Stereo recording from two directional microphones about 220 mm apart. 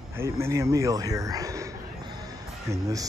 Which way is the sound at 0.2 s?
10° right (ahead or behind).